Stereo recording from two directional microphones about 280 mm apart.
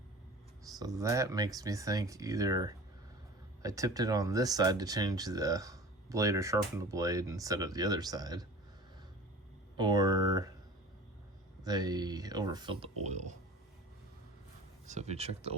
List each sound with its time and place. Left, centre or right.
0.7 s speech: centre
9.7 s speech: centre
11.6 s speech: centre
14.8 s speech: right